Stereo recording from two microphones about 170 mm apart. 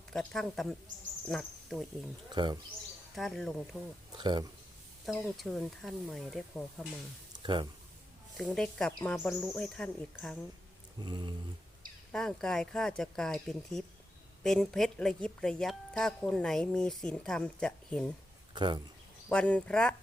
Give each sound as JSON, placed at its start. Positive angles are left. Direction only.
{"t": 0.1, "sound": "a woman's voice", "side_deg": 5}
{"t": 2.3, "sound": "speech", "side_deg": -25}
{"t": 3.2, "sound": "a woman's voice", "side_deg": 0}
{"t": 4.1, "sound": "speech", "side_deg": -25}
{"t": 5.0, "sound": "a woman's voice", "side_deg": 0}
{"t": 7.4, "sound": "speech", "side_deg": -25}
{"t": 8.4, "sound": "a woman's voice", "side_deg": 5}
{"t": 11.0, "sound": "speech", "side_deg": -25}
{"t": 12.1, "sound": "a woman's voice", "side_deg": 5}
{"t": 18.5, "sound": "speech", "side_deg": -25}
{"t": 19.3, "sound": "speech", "side_deg": 5}